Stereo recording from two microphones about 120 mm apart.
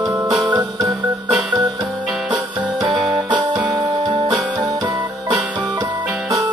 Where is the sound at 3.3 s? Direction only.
40° right (ahead or behind).